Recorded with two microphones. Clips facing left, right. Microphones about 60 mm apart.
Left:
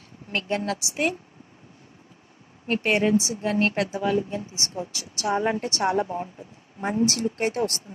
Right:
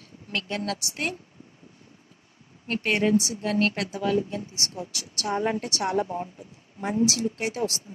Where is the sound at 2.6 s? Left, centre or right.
Centre.